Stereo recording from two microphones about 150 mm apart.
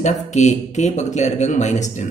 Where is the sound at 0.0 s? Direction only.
50° left (ahead or behind).